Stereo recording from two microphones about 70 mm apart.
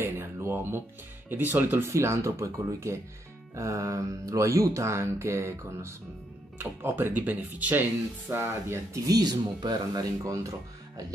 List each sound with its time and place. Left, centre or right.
0.0 s a sound: right
1.3 s speech: right
1.9 s mantra: right
6.6 s speech: right
8.3 s speech: right
9.0 s speech: right
10.2 s mantra: right